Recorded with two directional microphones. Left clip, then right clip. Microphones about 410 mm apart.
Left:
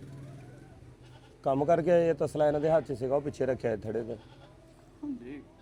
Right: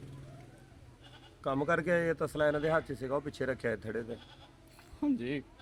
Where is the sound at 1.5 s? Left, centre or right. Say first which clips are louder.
Left 5 dB; centre.